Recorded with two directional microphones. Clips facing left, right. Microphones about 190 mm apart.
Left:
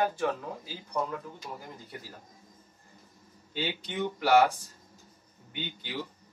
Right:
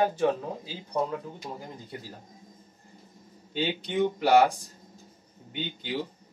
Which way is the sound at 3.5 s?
20° right (ahead or behind).